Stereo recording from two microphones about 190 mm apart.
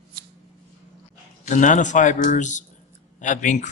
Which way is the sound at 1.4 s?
40° left (ahead or behind).